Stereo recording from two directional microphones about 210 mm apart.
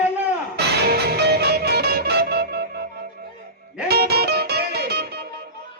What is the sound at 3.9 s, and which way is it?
Music, 50° right (ahead or behind).